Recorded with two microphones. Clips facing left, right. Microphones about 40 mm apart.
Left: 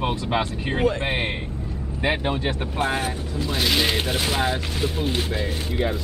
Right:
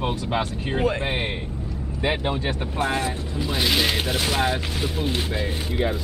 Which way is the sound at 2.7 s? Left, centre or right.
Left.